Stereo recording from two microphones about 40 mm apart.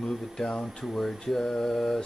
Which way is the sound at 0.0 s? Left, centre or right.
Centre.